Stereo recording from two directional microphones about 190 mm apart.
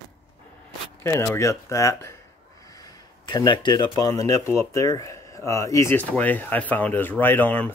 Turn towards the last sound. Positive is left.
turn(degrees=10)  # may be behind; listen again after turning